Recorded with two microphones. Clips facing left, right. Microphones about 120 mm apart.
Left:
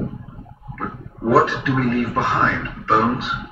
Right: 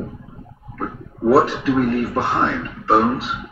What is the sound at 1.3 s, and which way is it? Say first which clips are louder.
Speech: right 1 dB; 35° right (ahead or behind).